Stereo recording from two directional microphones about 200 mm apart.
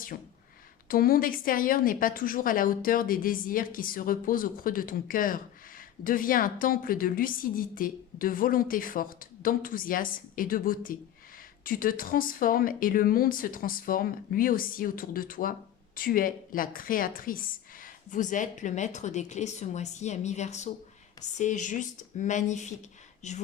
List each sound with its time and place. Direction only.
0.9 s a woman's voice: 45° left (ahead or behind)